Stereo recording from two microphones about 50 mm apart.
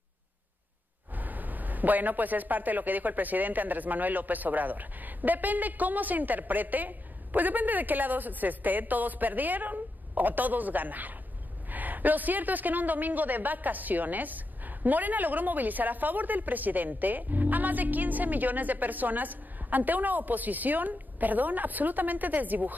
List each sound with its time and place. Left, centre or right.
1.1 s a man's voice: right